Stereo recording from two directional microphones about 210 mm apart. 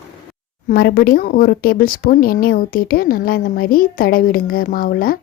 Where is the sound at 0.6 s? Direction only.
45° left (ahead or behind).